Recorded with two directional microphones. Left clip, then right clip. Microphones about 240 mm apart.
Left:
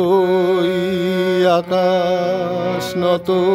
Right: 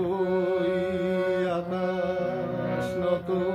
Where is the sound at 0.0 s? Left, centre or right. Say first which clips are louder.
Left 12 dB; left.